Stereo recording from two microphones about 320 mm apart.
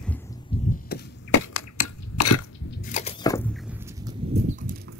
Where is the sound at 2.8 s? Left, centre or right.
Left.